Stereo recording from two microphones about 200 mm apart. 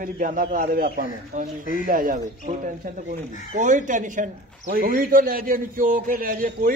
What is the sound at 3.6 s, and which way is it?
A man's voice, 40° right (ahead or behind).